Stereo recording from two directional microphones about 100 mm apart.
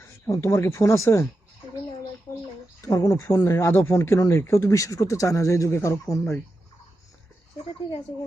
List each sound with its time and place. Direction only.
0.3 s speech: 30° left (ahead or behind)
2.8 s speech: 35° left (ahead or behind)